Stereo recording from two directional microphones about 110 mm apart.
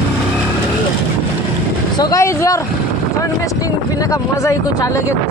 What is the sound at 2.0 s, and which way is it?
Speech, 30° left (ahead or behind).